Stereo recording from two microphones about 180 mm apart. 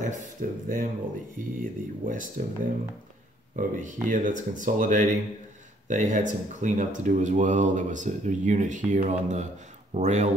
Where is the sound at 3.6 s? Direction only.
45° right (ahead or behind).